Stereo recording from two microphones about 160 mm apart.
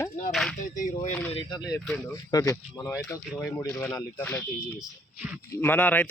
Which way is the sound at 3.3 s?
5° left (ahead or behind).